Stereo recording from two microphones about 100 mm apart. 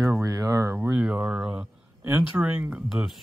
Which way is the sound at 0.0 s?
35° right (ahead or behind).